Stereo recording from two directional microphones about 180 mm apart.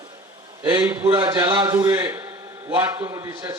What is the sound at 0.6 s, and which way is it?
A man's voice, 20° right (ahead or behind).